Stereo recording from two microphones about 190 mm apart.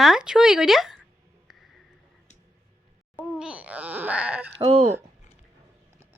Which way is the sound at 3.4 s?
5° right (ahead or behind).